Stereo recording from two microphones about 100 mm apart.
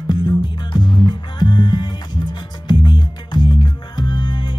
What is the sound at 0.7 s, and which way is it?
Music, 45° left (ahead or behind).